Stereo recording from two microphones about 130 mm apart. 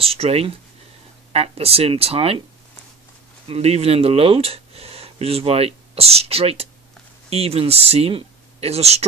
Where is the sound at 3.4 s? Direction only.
50° right (ahead or behind).